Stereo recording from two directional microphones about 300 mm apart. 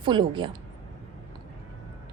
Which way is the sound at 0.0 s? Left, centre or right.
Centre.